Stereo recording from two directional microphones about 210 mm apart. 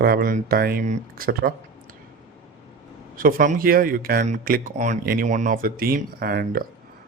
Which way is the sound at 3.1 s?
40° right (ahead or behind).